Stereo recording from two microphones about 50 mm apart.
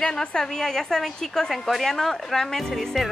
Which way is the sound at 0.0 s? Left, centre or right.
Centre.